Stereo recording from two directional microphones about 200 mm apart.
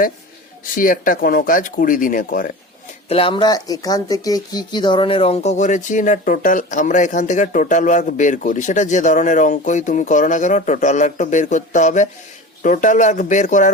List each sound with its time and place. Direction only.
0.6 s speech: 45° left (ahead or behind)
3.1 s speech: 25° left (ahead or behind)